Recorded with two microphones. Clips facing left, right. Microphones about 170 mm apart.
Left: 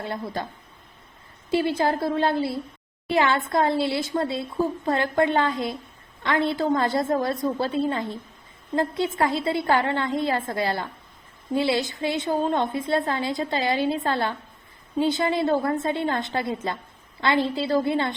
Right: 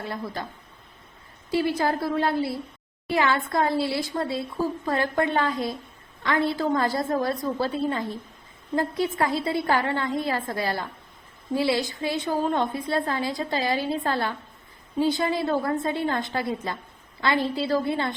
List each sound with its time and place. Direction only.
0.0 s a woman's voice: 25° left (ahead or behind)
1.5 s a woman's voice: 25° left (ahead or behind)